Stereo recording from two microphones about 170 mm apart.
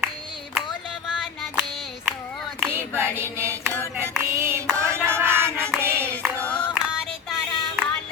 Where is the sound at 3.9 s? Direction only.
10° right (ahead or behind).